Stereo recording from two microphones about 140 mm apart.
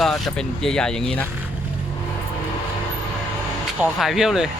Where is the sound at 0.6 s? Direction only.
5° left (ahead or behind).